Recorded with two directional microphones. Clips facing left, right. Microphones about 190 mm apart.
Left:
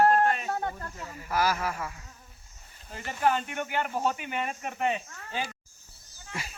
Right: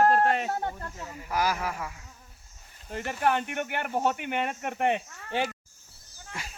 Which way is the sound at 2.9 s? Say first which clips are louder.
Even; 60° right (ahead or behind).